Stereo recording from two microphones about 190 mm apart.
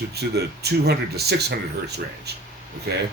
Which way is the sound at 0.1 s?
60° right (ahead or behind).